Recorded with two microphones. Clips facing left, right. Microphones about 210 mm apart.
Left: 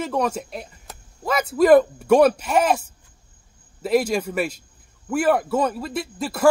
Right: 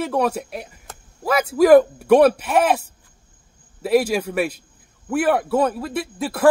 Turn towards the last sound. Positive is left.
turn(degrees=-5)  # may be behind; listen again after turning